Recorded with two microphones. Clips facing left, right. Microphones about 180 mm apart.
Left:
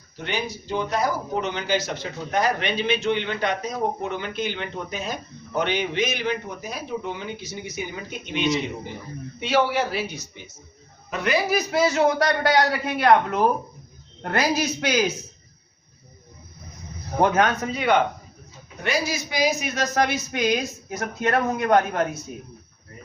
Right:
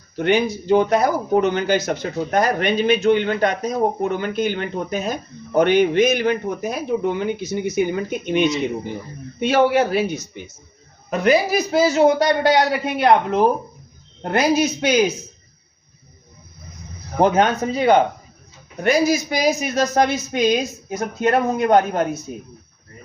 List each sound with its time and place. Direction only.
0.5 s speech: 55° right (ahead or behind)
11.1 s a woman's voice: 40° right (ahead or behind)
11.7 s speech: 25° right (ahead or behind)
17.2 s speech: 25° right (ahead or behind)